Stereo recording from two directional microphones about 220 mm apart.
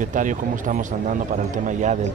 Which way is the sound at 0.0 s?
35° right (ahead or behind).